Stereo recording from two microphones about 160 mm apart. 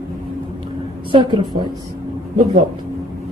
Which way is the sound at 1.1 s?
30° right (ahead or behind).